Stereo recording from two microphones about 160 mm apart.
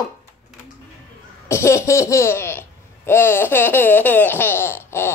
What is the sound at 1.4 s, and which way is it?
Speech, 15° left (ahead or behind).